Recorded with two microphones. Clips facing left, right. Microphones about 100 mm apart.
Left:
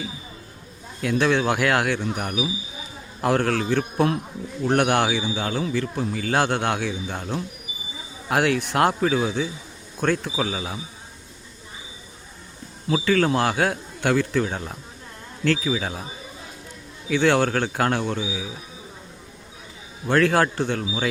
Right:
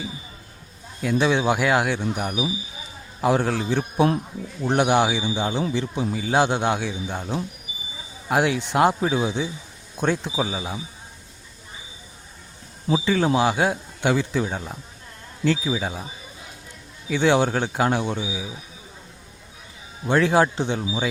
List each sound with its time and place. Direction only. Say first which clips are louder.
1.0 s a man's voice: even; 10° right (ahead or behind)
12.9 s a man's voice: even; 15° right (ahead or behind)
17.1 s a man's voice: even; 15° right (ahead or behind)
20.1 s a man's voice: right 1 dB; 10° right (ahead or behind)